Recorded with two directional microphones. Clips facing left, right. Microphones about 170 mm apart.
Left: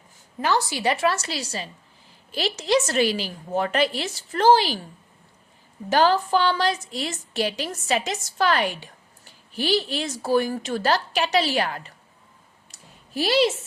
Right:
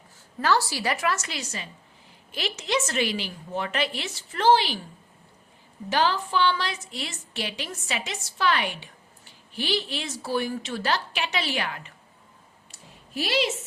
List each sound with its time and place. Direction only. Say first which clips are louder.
0.4 s a woman's voice: left 2 dB; 20° left (ahead or behind); by 4.8 s 40° left (ahead or behind)
5.9 s a woman's voice: left 5 dB; 45° left (ahead or behind)
12.7 s a sound: left 3 dB; 40° left (ahead or behind)